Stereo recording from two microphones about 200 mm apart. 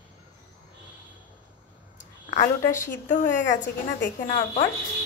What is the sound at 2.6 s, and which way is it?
Speech, 15° left (ahead or behind).